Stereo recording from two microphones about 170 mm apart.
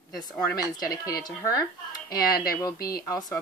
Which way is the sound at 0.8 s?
20° left (ahead or behind).